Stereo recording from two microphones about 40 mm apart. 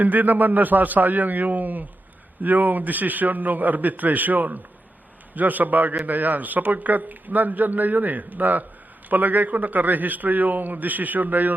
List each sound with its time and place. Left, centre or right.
0.0 s a man's voice: right